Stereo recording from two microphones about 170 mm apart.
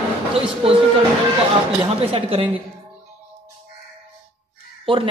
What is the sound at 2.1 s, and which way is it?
Speech, 35° right (ahead or behind).